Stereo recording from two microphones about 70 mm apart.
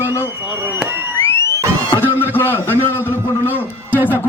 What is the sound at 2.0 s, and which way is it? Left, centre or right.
A man's voice, left.